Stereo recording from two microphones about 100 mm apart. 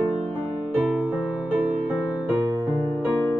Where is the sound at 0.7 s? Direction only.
15° right (ahead or behind).